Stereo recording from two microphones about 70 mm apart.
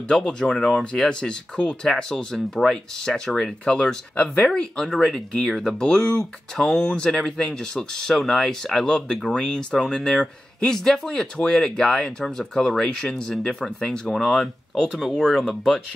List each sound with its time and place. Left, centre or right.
0.1 s speech: centre
0.7 s speech: centre
1.0 s speech: centre